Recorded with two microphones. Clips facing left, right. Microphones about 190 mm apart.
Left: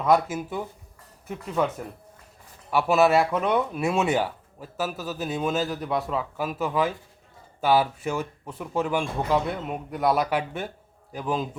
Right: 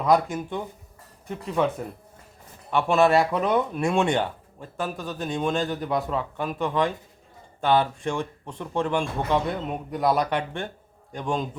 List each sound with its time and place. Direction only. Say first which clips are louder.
0.0 s speech: even; centre (ahead or behind)